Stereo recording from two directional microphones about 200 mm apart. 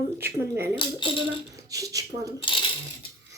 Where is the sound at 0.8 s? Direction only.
25° left (ahead or behind).